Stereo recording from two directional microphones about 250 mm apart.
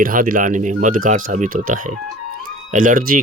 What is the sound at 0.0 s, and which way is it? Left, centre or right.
Speech, right.